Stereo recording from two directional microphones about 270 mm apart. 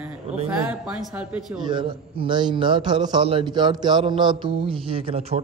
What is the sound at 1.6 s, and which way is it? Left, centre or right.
A man's voice, centre.